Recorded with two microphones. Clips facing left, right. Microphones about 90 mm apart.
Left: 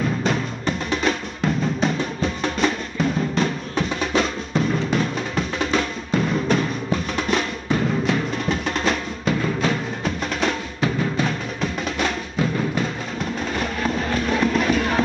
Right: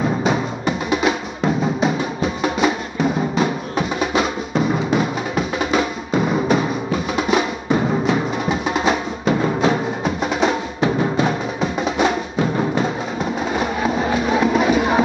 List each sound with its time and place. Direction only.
0.2 s music: 5° right (ahead or behind)
9.2 s music: 25° right (ahead or behind)
10.0 s music: 10° right (ahead or behind)
10.8 s music: 20° right (ahead or behind)
13.2 s music: 10° right (ahead or behind)